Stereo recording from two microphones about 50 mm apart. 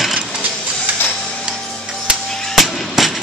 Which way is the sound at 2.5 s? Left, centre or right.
Centre.